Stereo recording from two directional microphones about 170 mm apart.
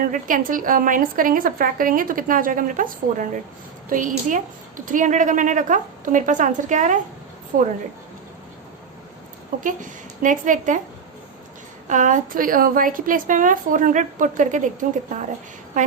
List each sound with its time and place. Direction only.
0.0 s a woman's voice: 50° right (ahead or behind)
9.6 s a woman's voice: 50° right (ahead or behind)
11.9 s a woman's voice: 50° right (ahead or behind)